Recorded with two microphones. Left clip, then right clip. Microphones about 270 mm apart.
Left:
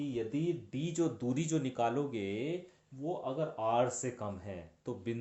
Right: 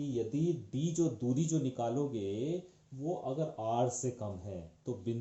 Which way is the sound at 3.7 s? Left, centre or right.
Centre.